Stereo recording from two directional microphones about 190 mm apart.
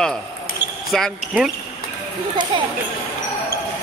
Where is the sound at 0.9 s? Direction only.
Centre (ahead or behind).